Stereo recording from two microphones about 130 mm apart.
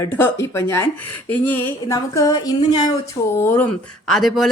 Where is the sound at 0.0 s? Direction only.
20° left (ahead or behind).